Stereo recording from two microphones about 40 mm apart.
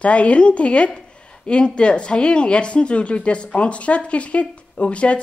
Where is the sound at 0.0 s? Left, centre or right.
Left.